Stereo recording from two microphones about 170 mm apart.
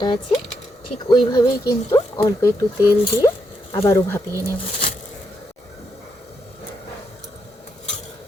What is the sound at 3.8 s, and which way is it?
Speech, 15° left (ahead or behind).